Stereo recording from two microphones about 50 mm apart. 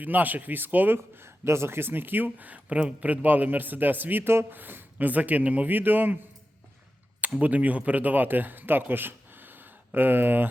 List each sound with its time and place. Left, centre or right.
0.0 s speech: right
1.2 s speech: right
4.5 s speech: right
7.4 s speech: right